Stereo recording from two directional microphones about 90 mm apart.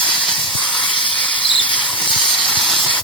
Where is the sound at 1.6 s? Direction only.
15° left (ahead or behind).